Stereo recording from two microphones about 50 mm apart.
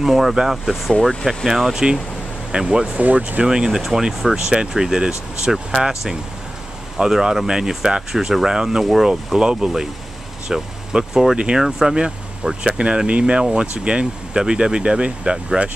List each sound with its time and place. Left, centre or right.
0.0 s speech: centre
3.0 s speech: right
3.4 s speech: centre